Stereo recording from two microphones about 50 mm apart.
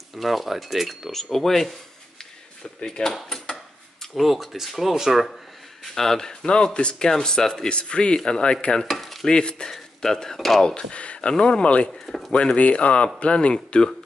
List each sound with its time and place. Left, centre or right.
0.1 s speech: centre
2.8 s speech: centre
3.3 s a sound: centre
4.1 s speech: centre
5.9 s speech: centre
8.8 s stir: centre
9.3 s speech: centre
11.9 s speech: centre
12.3 s speech: left